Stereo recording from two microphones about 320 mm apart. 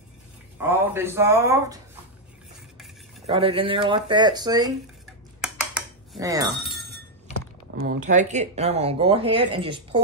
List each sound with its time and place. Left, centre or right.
0.6 s speech: centre
3.3 s speech: centre
5.4 s dishes: centre
6.5 s glass: centre
7.7 s speech: right